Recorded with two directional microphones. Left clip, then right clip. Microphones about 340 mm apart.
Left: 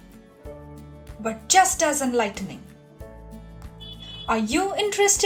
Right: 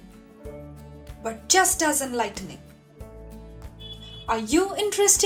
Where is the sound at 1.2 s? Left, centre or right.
Centre.